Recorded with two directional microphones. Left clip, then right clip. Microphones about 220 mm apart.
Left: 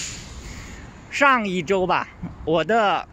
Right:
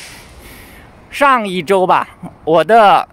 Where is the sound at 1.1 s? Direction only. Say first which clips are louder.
Right 6 dB; 15° right (ahead or behind).